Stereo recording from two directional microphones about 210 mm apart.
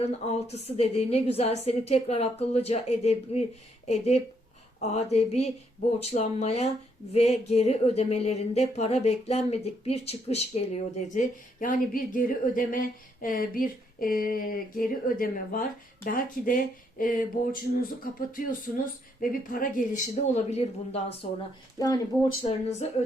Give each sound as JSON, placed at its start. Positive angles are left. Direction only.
{"t": 0.0, "sound": "speech", "side_deg": 30}
{"t": 21.8, "sound": "speech", "side_deg": 20}
{"t": 22.8, "sound": "speech", "side_deg": 30}